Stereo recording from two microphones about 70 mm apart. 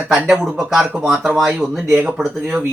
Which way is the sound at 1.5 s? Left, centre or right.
Right.